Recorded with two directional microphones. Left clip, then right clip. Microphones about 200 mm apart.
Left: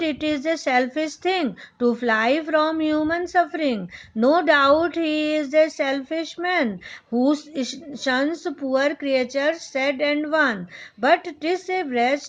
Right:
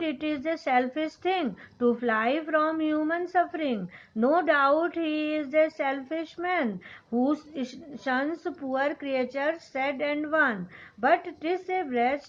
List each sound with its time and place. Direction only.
0.0 s a woman's voice: 50° left (ahead or behind)